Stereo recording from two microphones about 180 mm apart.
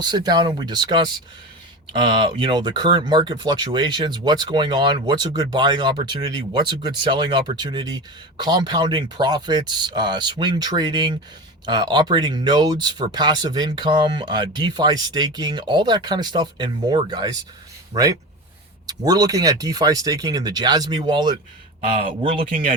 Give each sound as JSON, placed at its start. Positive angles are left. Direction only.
{"t": 0.0, "sound": "speech", "side_deg": -25}